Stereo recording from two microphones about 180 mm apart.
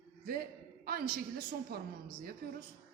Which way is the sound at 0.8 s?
55° right (ahead or behind).